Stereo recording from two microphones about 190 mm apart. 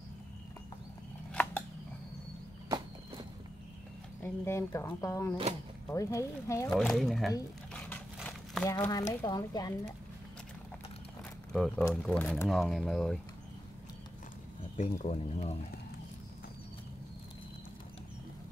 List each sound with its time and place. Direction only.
1.3 s scissors: 10° left (ahead or behind)
2.7 s walk: 20° right (ahead or behind)
4.2 s speech: 15° left (ahead or behind)
6.7 s speech: centre (ahead or behind)
8.6 s speech: 15° left (ahead or behind)
11.5 s speech: centre (ahead or behind)
14.8 s speech: 40° left (ahead or behind)